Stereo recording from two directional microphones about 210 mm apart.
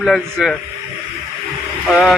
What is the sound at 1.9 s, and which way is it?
Speech, centre (ahead or behind).